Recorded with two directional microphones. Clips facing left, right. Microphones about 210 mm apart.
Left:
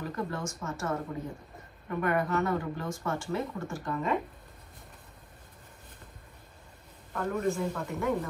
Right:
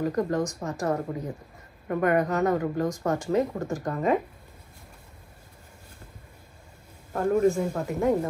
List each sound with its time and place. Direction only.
0.0 s speech: 40° right (ahead or behind)
7.1 s a man's voice: 45° right (ahead or behind)